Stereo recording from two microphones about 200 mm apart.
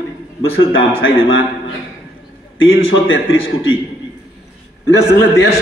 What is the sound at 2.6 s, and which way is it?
A man's voice, 75° left (ahead or behind).